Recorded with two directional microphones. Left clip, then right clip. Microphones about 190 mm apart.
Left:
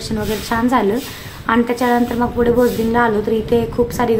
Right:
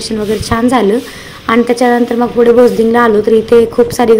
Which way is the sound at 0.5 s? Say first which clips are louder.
Right 5 dB; 20° right (ahead or behind).